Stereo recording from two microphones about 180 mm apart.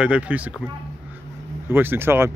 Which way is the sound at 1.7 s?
10° right (ahead or behind).